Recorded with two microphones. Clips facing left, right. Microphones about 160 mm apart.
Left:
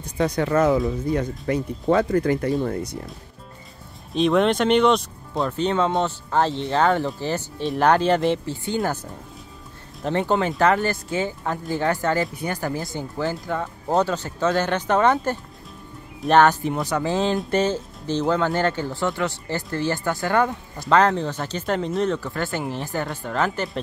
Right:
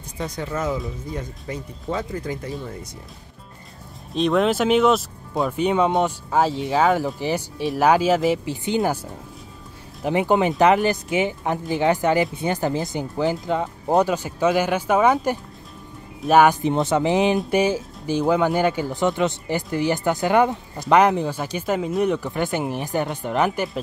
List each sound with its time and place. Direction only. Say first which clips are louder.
0.2 s speech: left 7 dB; 70° left (ahead or behind)
4.1 s speech: left 1 dB; centre (ahead or behind)
8.5 s speech: right 3 dB; 15° right (ahead or behind)
10.0 s speech: right 3 dB; 15° right (ahead or behind)
16.7 s speech: right 4 dB; 25° right (ahead or behind)